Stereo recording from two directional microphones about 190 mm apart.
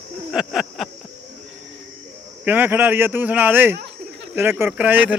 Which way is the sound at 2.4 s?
10° right (ahead or behind).